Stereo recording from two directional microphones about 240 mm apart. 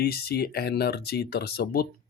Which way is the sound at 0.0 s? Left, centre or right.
Left.